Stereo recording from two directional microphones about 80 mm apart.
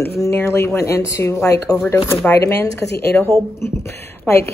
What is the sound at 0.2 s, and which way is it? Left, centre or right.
Speech, left.